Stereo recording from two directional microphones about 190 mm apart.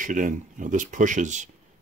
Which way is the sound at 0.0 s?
45° right (ahead or behind).